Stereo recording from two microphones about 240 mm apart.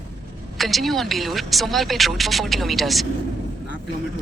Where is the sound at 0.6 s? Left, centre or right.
Centre.